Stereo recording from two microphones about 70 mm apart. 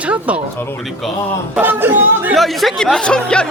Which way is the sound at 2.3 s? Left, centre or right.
Centre.